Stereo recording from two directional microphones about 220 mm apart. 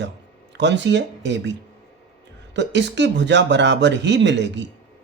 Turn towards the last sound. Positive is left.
turn(degrees=-55)  # may be behind; listen again after turning